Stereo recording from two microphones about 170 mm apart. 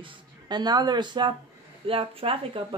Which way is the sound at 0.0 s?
25° right (ahead or behind).